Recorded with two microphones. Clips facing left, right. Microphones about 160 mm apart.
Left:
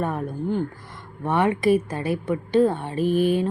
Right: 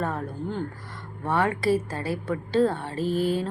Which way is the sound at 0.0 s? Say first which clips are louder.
Left 3 dB; 15° left (ahead or behind).